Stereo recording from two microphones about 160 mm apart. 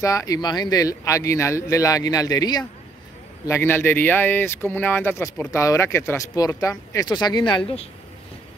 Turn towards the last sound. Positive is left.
turn(degrees=30)  # may be behind; listen again after turning